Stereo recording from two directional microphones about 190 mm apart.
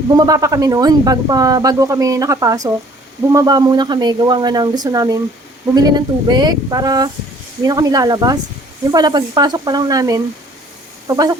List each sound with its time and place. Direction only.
0.1 s speech: 20° right (ahead or behind)